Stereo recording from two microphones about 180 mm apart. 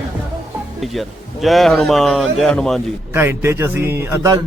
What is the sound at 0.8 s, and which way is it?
A man's voice, centre (ahead or behind).